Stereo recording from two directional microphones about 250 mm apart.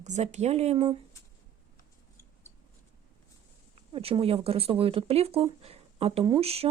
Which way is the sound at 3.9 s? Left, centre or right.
Right.